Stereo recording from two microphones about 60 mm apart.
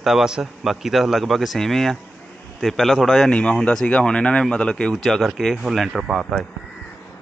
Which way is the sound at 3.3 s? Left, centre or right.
Centre.